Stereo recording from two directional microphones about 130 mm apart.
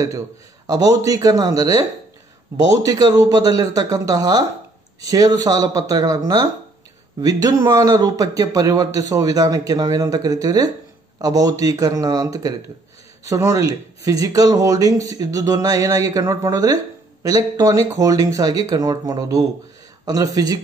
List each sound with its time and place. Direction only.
0.7 s speech: 30° right (ahead or behind)